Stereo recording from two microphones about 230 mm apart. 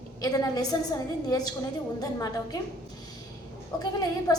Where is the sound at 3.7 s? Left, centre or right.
Centre.